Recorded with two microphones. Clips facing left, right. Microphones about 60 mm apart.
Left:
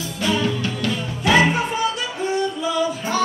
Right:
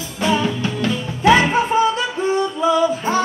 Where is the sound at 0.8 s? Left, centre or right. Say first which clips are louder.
Right 7 dB; right.